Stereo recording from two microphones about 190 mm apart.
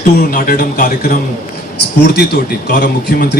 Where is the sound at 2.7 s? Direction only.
50° left (ahead or behind).